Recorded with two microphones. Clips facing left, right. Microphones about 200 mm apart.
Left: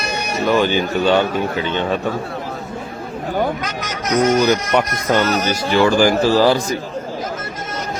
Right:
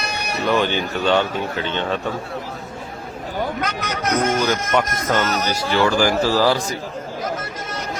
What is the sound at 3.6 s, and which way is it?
Speech, 60° right (ahead or behind).